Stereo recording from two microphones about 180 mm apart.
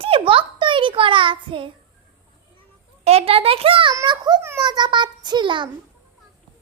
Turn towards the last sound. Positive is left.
turn(degrees=-25)  # may be behind; listen again after turning